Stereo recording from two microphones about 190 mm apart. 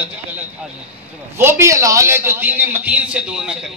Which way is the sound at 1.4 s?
15° right (ahead or behind).